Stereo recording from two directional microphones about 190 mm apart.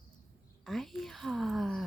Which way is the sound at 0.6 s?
Centre (ahead or behind).